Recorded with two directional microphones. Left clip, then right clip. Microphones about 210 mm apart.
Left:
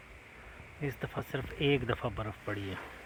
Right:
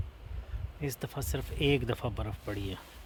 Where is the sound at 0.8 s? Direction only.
20° right (ahead or behind).